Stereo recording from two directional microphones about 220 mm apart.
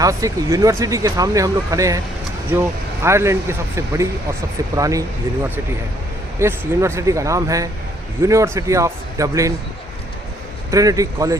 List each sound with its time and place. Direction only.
0.0 s speech: 15° right (ahead or behind)
10.7 s speech: 15° right (ahead or behind)